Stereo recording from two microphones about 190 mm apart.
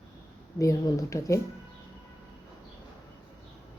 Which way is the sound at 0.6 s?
15° left (ahead or behind).